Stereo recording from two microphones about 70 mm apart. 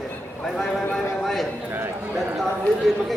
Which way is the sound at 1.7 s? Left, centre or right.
Right.